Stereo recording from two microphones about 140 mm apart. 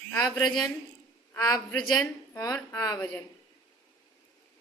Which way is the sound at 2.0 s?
25° left (ahead or behind).